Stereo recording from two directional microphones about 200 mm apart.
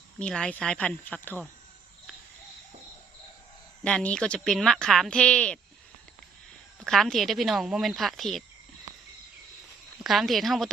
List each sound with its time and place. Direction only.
0.2 s speech: 5° left (ahead or behind)
3.8 s speech: 5° left (ahead or behind)
6.7 s speech: centre (ahead or behind)
10.0 s speech: centre (ahead or behind)